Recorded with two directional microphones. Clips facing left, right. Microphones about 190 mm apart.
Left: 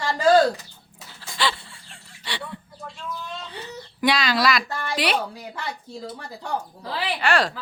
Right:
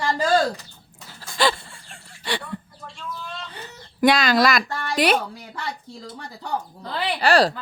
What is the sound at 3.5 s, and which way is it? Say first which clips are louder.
Speech: left 4 dB; 45° right (ahead or behind).